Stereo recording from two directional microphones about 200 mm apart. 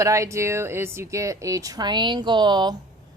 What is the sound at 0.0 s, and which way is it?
Speech, 15° right (ahead or behind).